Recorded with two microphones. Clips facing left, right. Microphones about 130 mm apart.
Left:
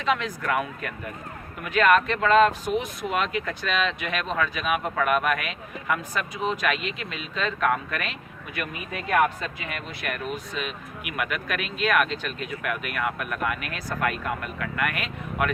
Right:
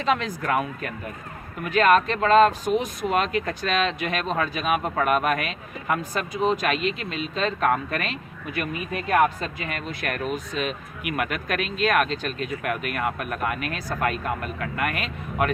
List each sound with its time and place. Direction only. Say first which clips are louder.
0.0 s speech: right 2 dB; 35° right (ahead or behind)